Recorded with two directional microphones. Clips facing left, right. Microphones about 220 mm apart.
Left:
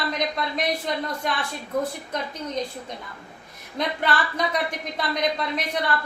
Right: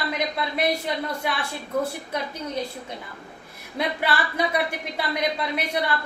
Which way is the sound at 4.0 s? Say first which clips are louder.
Even; 10° right (ahead or behind).